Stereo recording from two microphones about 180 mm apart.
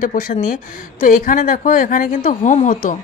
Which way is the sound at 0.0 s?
50° left (ahead or behind).